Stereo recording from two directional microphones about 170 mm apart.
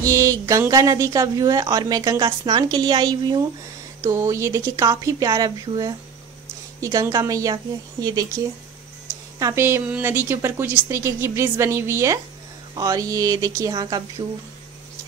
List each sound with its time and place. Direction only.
0.0 s a woman's voice: 20° right (ahead or behind)
9.4 s a woman's voice: 20° right (ahead or behind)